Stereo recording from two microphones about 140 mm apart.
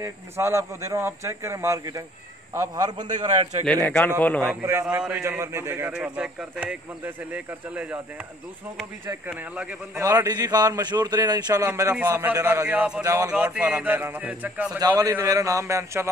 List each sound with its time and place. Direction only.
0.0 s a man's voice: 20° right (ahead or behind)
3.8 s a man's voice: 10° left (ahead or behind)
4.6 s a man's voice: 20° right (ahead or behind)
9.0 s a man's voice: 15° right (ahead or behind)
9.9 s a man's voice: 25° right (ahead or behind); by 13.0 s 10° right (ahead or behind)
13.0 s a man's voice: 20° right (ahead or behind)
14.8 s a man's voice: 25° right (ahead or behind)